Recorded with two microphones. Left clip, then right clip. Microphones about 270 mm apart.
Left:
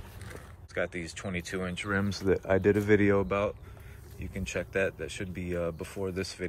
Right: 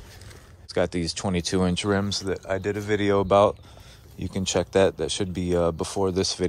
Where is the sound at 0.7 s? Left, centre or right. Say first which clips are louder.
Right 8 dB; right.